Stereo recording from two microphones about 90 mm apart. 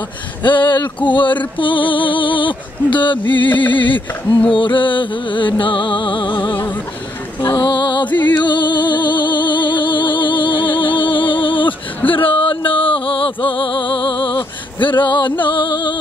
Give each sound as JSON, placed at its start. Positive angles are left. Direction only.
{"t": 0.4, "sound": "speech", "side_deg": 60}
{"t": 1.6, "sound": "music", "side_deg": 70}
{"t": 3.6, "sound": "speech", "side_deg": 65}
{"t": 4.5, "sound": "music", "side_deg": 65}